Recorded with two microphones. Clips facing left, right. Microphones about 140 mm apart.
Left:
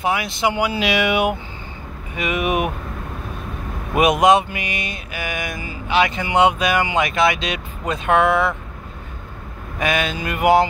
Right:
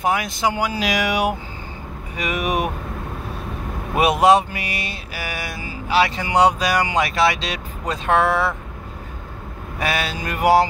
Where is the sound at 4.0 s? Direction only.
35° right (ahead or behind).